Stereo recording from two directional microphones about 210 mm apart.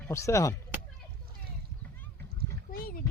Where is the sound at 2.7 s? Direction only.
45° left (ahead or behind).